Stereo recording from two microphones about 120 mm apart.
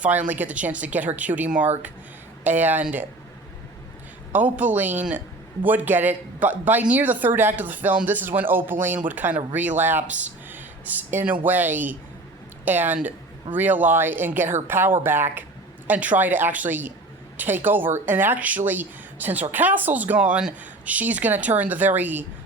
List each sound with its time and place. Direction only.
0.3 s a man's voice: 10° right (ahead or behind)
4.3 s a man's voice: 15° right (ahead or behind)